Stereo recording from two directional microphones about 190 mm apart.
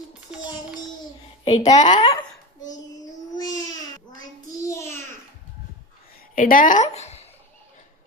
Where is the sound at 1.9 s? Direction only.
25° left (ahead or behind).